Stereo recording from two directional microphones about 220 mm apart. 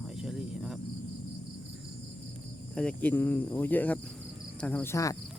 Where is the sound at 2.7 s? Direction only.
5° left (ahead or behind).